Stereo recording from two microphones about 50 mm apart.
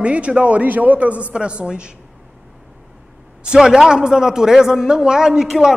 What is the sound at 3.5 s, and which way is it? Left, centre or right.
A man's voice, centre.